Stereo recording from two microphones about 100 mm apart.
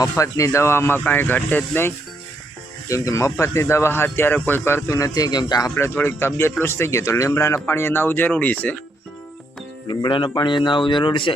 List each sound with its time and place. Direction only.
0.0 s speech: 35° left (ahead or behind)
2.9 s a man's voice: 30° left (ahead or behind)
5.7 s speech: 25° left (ahead or behind)
9.9 s speech: 50° left (ahead or behind)